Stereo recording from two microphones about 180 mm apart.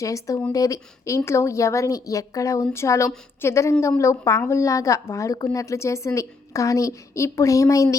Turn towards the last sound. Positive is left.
turn(degrees=15)  # may be behind; listen again after turning